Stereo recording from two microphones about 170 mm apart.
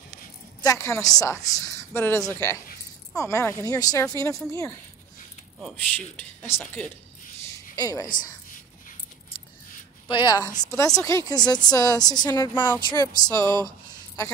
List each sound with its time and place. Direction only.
0.6 s a woman's voice: 20° left (ahead or behind)
5.6 s speech: centre (ahead or behind)
6.1 s speech: 15° left (ahead or behind)
7.7 s a woman's voice: 20° left (ahead or behind)
10.0 s a woman's voice: 25° left (ahead or behind)